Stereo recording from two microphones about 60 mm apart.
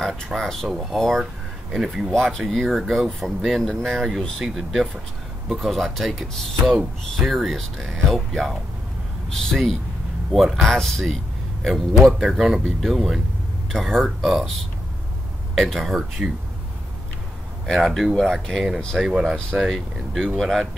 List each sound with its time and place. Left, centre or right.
0.4 s speech: centre
2.1 s speech: centre
15.5 s speech: centre
17.7 s speech: centre
18.1 s speech: centre
18.9 s speech: centre
19.5 s speech: centre